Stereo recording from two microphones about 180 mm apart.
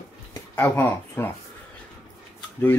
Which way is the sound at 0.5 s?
15° left (ahead or behind).